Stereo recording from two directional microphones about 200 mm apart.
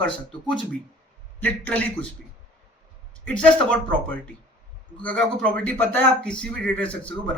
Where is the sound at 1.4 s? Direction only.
5° left (ahead or behind).